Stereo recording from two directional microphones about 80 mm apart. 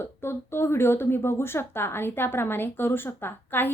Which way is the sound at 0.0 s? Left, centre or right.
Left.